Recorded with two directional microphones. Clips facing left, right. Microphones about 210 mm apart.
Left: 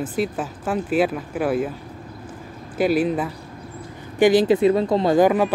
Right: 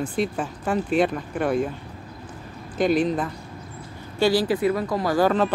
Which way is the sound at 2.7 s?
5° left (ahead or behind).